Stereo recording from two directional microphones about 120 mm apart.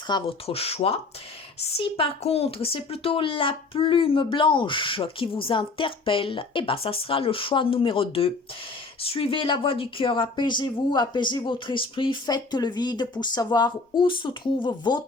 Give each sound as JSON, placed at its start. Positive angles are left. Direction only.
{"t": 0.1, "sound": "speech", "side_deg": 40}
{"t": 0.4, "sound": "speech", "side_deg": 55}